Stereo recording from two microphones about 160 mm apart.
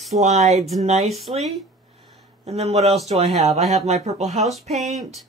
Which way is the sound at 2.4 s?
40° right (ahead or behind).